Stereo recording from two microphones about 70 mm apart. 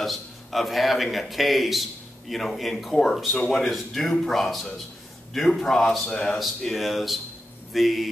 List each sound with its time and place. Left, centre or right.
0.0 s a man's voice: centre
6.4 s speech: centre